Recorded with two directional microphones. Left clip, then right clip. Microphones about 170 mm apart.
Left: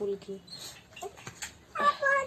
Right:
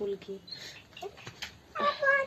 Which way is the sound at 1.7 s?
15° right (ahead or behind).